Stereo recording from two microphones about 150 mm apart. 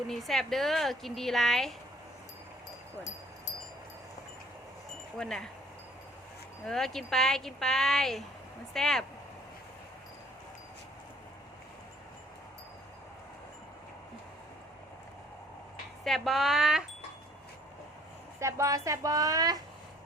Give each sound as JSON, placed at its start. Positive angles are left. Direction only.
{"t": 0.1, "sound": "speech", "side_deg": 0}
{"t": 5.1, "sound": "speech", "side_deg": 5}
{"t": 6.7, "sound": "speech", "side_deg": 0}
{"t": 16.0, "sound": "speech", "side_deg": 0}
{"t": 18.3, "sound": "a woman's voice", "side_deg": -20}